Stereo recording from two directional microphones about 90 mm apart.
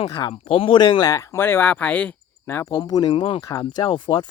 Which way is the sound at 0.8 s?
50° left (ahead or behind).